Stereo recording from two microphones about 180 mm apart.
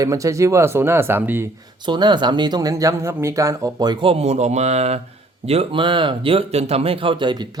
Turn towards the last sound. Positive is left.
turn(degrees=-25)  # may be behind; listen again after turning